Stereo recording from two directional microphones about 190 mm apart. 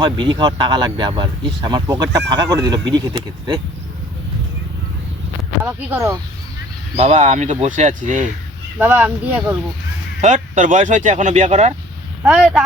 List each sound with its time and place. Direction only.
0.0 s speech: 25° right (ahead or behind)
5.6 s speech: 15° right (ahead or behind)
6.9 s speech: 35° right (ahead or behind)
8.8 s speech: 10° right (ahead or behind)
10.2 s speech: 40° right (ahead or behind)
12.2 s speech: centre (ahead or behind)